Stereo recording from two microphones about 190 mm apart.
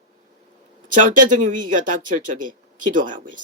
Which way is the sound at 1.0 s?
45° right (ahead or behind).